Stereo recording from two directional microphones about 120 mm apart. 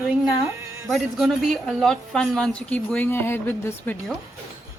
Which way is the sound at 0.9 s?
Centre (ahead or behind).